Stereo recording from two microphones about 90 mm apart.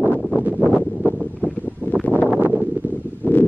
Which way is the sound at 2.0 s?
15° left (ahead or behind).